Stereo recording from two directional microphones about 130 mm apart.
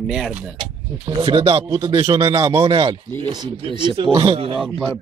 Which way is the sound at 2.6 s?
50° right (ahead or behind).